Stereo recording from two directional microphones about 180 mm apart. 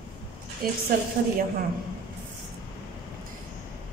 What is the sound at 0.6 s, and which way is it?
Speech, 55° right (ahead or behind).